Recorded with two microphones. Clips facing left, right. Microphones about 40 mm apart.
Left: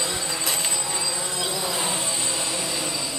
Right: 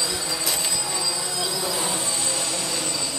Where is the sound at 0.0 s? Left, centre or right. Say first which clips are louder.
Even; left.